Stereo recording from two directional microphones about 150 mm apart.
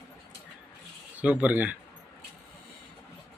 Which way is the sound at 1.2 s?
10° right (ahead or behind).